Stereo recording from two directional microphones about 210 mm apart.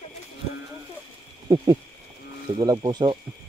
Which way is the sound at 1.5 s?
20° right (ahead or behind).